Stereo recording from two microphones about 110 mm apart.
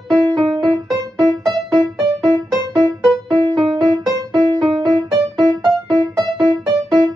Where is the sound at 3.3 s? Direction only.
45° right (ahead or behind).